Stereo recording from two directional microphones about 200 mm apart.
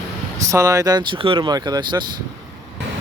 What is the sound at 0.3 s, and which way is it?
Speech, 15° right (ahead or behind).